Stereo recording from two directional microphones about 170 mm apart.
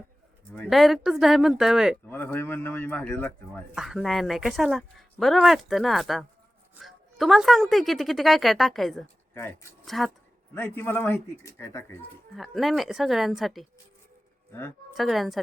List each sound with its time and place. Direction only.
0.7 s a woman's voice: centre (ahead or behind)
2.0 s speech: 10° left (ahead or behind)
3.8 s a woman's voice: centre (ahead or behind)
9.3 s speech: 15° left (ahead or behind)
9.8 s speech: centre (ahead or behind)
10.5 s speech: 15° left (ahead or behind)
12.4 s a woman's voice: centre (ahead or behind)
14.5 s speech: 15° left (ahead or behind)
14.9 s a woman's voice: centre (ahead or behind)